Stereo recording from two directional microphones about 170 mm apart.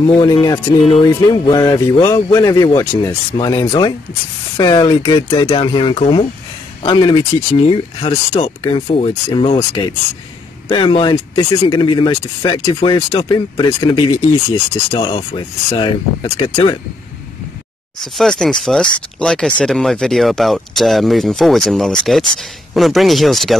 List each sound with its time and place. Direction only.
0.0 s speech: 25° left (ahead or behind)
15.1 s speech: 30° left (ahead or behind)
18.0 s speech: centre (ahead or behind)